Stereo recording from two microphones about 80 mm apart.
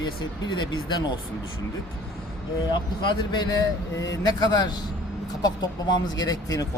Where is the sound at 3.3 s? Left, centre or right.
Left.